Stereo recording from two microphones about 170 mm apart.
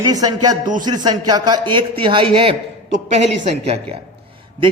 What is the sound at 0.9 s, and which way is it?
A man's voice, 25° right (ahead or behind).